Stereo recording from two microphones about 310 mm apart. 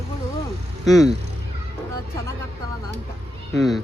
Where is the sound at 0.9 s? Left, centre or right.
Centre.